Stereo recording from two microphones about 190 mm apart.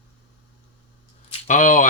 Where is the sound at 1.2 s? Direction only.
40° left (ahead or behind).